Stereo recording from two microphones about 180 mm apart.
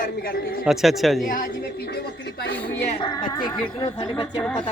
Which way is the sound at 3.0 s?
25° left (ahead or behind).